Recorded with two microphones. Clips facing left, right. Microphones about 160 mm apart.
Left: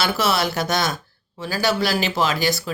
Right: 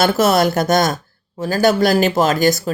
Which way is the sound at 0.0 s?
50° right (ahead or behind).